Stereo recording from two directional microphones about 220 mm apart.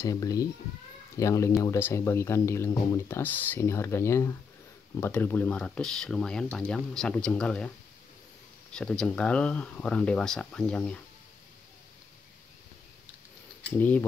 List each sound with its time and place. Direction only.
0.0 s speech: 15° left (ahead or behind)
8.7 s speech: 5° left (ahead or behind)
13.7 s speech: 5° left (ahead or behind)